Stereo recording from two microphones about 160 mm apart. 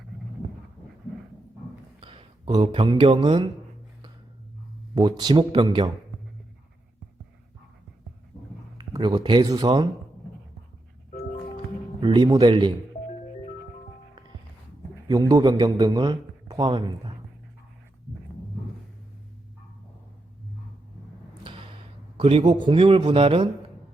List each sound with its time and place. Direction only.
2.0 s speech: 35° right (ahead or behind)
4.9 s speech: 25° right (ahead or behind)
8.8 s speech: 30° right (ahead or behind)
12.0 s speech: 30° right (ahead or behind)
15.0 s a man's voice: 25° right (ahead or behind)
21.5 s a sound: 30° right (ahead or behind)
22.2 s a man's voice: 35° right (ahead or behind)